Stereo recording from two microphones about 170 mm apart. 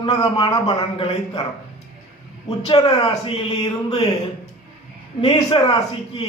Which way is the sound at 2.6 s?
30° left (ahead or behind).